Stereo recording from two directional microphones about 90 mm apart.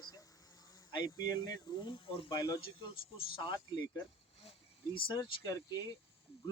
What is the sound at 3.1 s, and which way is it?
Speech, 80° left.